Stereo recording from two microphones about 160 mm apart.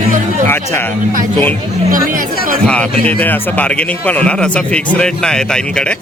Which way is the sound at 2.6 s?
10° left (ahead or behind).